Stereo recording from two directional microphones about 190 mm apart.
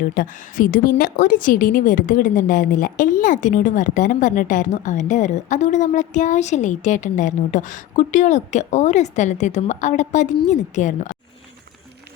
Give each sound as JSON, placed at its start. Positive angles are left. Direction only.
{"t": 0.0, "sound": "a woman's voice", "side_deg": 45}